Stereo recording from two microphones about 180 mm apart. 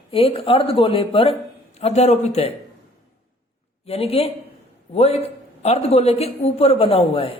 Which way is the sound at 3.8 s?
35° left (ahead or behind).